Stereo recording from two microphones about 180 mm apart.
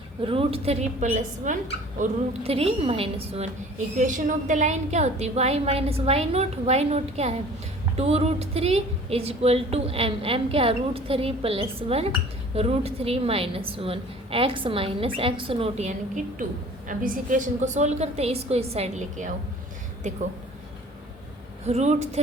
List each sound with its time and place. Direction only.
0.3 s a woman's voice: 30° right (ahead or behind)
3.9 s a woman's voice: 45° right (ahead or behind)
21.6 s a woman's voice: 40° right (ahead or behind)